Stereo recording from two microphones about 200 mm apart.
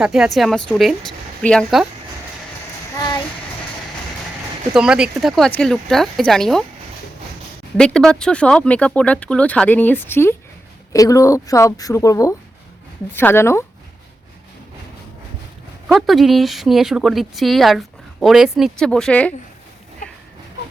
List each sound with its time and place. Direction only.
0.0 s speech: centre (ahead or behind)
4.7 s speech: 5° right (ahead or behind)
7.8 s a woman's voice: 5° left (ahead or behind)
15.9 s speech: centre (ahead or behind)